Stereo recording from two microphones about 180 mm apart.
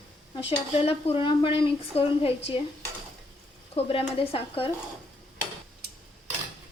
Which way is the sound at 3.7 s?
30° left (ahead or behind).